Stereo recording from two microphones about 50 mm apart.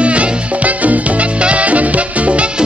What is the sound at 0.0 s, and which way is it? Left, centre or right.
Music, right.